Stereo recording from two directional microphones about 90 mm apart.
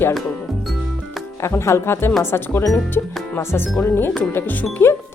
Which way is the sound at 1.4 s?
30° left (ahead or behind).